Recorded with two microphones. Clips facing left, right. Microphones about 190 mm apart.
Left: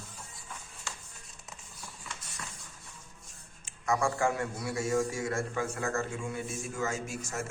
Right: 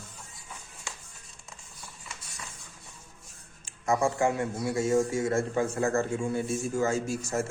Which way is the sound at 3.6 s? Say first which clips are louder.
Right 3 dB; 25° right (ahead or behind).